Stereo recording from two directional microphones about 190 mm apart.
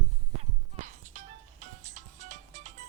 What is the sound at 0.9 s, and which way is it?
Music, 40° right (ahead or behind).